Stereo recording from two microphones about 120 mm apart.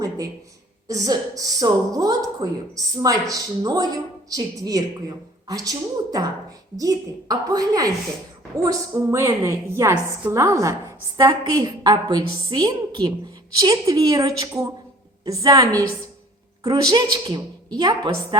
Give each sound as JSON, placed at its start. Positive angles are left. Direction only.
{"t": 0.9, "sound": "a woman's voice", "side_deg": -30}